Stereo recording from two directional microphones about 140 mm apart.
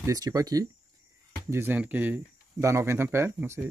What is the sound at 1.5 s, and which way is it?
Speech, 15° right (ahead or behind).